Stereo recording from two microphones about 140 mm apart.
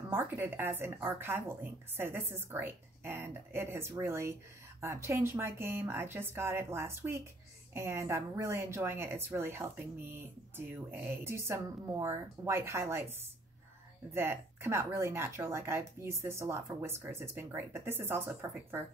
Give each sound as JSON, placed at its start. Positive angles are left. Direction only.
{"t": 0.1, "sound": "speech", "side_deg": -15}
{"t": 14.1, "sound": "speech", "side_deg": -15}